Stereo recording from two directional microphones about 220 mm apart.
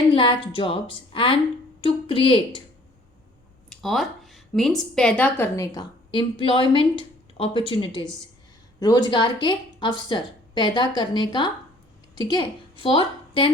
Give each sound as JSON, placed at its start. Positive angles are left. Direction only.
{"t": 0.1, "sound": "a woman's voice", "side_deg": 25}
{"t": 3.7, "sound": "a woman's voice", "side_deg": 0}